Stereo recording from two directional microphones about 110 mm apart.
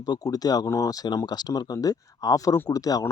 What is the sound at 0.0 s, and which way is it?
Speech, 35° left (ahead or behind).